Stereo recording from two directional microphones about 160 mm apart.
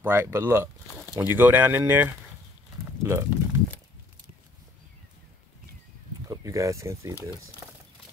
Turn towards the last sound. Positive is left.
turn(degrees=-20)  # may be behind; listen again after turning